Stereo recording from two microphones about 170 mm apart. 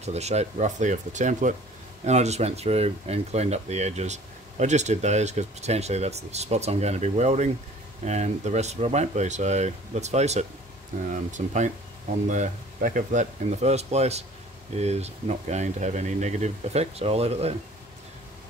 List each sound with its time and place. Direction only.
0.0 s speech: 40° right (ahead or behind)